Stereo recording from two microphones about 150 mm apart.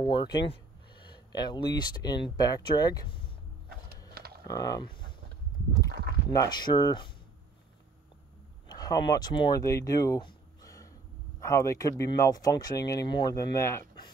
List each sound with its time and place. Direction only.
0.0 s speech: 30° left (ahead or behind)
4.1 s a sound: 90° right
4.5 s speech: 25° left (ahead or behind)
6.3 s speech: 25° left (ahead or behind)
8.6 s speech: 25° left (ahead or behind)